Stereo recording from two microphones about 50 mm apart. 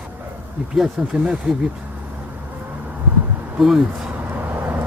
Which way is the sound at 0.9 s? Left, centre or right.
Centre.